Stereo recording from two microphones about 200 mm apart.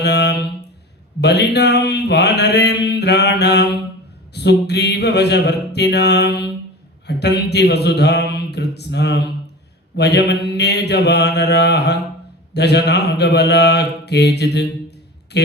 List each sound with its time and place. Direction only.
0.0 s a sound: 55° left (ahead or behind)
1.2 s mantra: 55° left (ahead or behind)
12.5 s speech: 55° left (ahead or behind)